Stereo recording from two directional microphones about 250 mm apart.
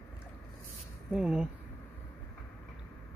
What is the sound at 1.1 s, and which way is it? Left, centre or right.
Speech, centre.